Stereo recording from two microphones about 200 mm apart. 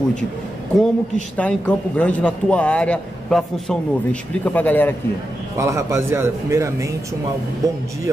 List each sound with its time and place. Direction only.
0.7 s a man's voice: 5° left (ahead or behind)
5.6 s speech: 15° right (ahead or behind)